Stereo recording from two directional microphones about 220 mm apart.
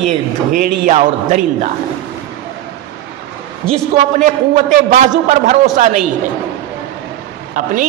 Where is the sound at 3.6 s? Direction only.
5° left (ahead or behind).